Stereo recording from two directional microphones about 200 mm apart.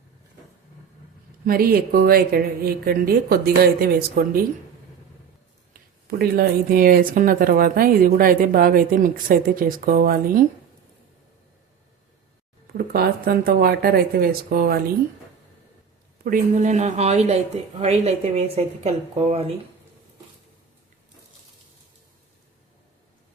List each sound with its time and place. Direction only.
1.5 s speech: 50° right (ahead or behind)
5.7 s speech: 50° right (ahead or behind)
12.7 s speech: 50° right (ahead or behind)
16.2 s speech: 40° right (ahead or behind)